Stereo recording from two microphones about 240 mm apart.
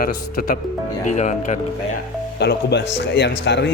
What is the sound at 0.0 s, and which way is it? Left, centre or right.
Speech, left.